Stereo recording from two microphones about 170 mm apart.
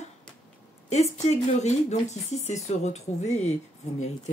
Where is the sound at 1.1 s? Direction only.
40° left (ahead or behind).